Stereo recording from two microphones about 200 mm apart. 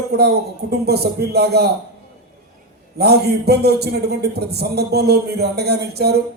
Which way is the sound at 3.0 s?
55° right (ahead or behind).